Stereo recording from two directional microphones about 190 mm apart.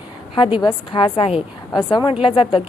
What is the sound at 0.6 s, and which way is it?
Speech, 25° left (ahead or behind).